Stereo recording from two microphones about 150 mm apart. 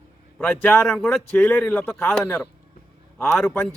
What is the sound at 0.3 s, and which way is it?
A man's voice, 10° left (ahead or behind).